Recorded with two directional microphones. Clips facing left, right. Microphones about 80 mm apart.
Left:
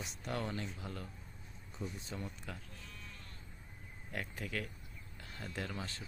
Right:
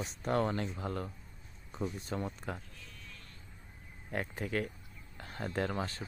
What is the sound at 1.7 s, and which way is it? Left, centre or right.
Speech, right.